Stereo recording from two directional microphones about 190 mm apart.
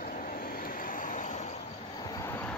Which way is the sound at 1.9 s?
20° left (ahead or behind).